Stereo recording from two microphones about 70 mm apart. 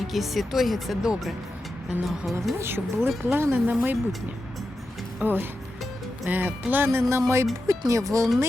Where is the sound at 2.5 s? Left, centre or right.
Right.